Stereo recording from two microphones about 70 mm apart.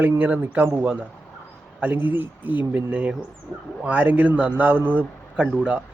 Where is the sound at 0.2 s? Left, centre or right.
Right.